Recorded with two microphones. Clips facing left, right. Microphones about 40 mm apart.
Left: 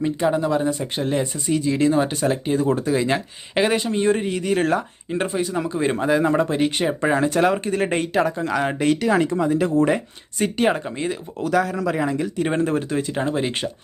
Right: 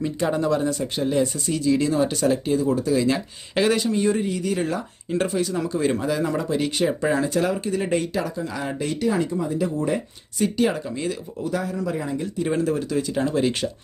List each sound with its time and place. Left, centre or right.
0.3 s speech: centre
2.6 s speech: left
3.5 s speech: left
5.0 s speech: left
7.2 s speech: left
9.0 s speech: left
10.3 s speech: left
11.4 s a man's voice: left
12.5 s speech: left